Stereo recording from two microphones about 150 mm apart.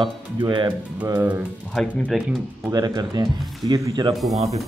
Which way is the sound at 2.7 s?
25° right (ahead or behind).